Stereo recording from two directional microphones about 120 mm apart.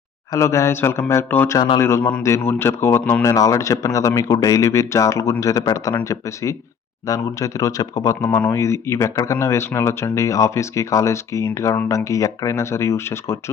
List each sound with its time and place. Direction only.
0.3 s speech: 25° left (ahead or behind)
1.5 s a man's voice: 40° left (ahead or behind)
1.8 s speech: 20° left (ahead or behind)